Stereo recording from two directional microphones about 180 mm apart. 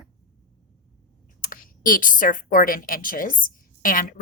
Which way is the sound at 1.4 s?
50° left (ahead or behind).